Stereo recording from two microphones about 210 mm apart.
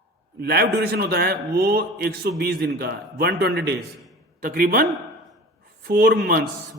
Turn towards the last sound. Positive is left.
turn(degrees=-45)  # may be behind; listen again after turning